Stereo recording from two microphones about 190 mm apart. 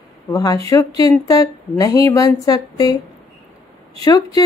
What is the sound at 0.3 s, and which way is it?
A woman's voice, 20° left (ahead or behind).